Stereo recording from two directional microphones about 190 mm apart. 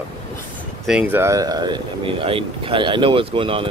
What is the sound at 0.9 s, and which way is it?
Speech, 10° right (ahead or behind).